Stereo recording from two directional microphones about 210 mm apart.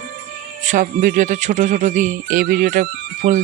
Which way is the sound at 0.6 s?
40° right (ahead or behind).